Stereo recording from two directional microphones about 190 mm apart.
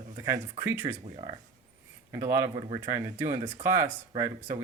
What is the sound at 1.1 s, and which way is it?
Speech, 25° right (ahead or behind).